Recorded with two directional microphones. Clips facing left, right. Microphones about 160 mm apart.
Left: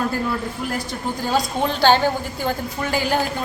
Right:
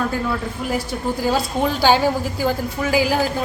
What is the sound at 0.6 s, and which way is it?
A woman's voice, centre (ahead or behind).